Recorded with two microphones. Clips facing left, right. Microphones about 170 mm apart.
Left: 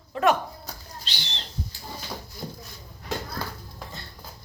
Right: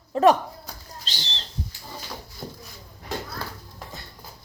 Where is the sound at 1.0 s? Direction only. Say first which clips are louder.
Right 2 dB; 40° right (ahead or behind).